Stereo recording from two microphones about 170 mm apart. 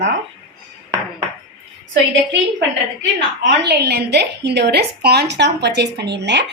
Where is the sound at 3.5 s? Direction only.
80° right.